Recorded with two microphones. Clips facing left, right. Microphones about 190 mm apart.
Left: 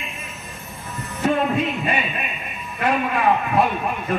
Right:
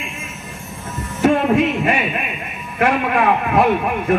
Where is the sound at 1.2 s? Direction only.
90° right.